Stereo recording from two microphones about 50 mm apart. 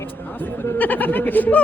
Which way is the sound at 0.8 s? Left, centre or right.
Left.